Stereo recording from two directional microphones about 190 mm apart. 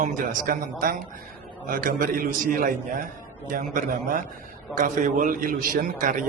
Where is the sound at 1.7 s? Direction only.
45° right (ahead or behind).